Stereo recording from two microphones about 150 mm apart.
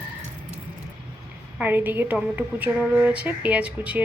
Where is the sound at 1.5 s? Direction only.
10° right (ahead or behind).